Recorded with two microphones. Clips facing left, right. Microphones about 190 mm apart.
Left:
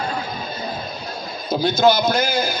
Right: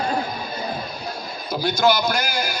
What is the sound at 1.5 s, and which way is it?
A man's voice, 20° left (ahead or behind).